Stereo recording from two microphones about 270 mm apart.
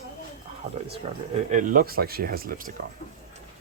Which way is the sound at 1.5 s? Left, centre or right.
Right.